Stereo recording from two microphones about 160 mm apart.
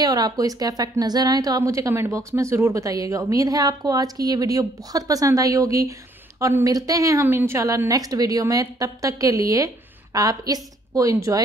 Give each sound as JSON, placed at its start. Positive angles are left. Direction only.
{"t": 0.0, "sound": "a woman's voice", "side_deg": -25}